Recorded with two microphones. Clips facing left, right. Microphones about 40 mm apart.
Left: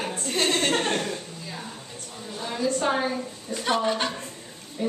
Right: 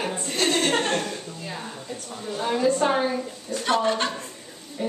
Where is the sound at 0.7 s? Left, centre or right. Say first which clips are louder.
Right 1 dB; centre.